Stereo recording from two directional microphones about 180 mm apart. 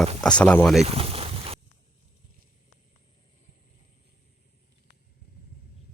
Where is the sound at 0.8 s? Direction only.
35° right (ahead or behind).